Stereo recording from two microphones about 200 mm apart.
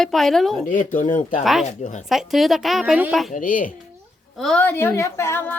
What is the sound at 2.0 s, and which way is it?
A woman's voice, centre (ahead or behind).